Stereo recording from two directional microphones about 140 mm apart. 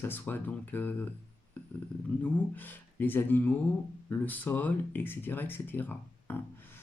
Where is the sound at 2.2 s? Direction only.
15° left (ahead or behind).